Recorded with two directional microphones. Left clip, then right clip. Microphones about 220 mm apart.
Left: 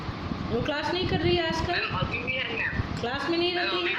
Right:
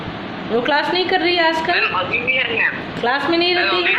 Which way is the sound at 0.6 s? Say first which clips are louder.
Right 12 dB; 5° right (ahead or behind).